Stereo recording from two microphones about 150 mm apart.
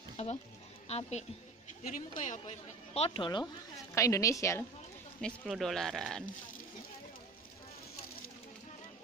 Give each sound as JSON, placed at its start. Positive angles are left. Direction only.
{"t": 0.2, "sound": "a woman's voice", "side_deg": 50}
{"t": 1.8, "sound": "a woman's voice", "side_deg": 60}
{"t": 3.9, "sound": "a woman's voice", "side_deg": 20}
{"t": 5.2, "sound": "speech", "side_deg": 0}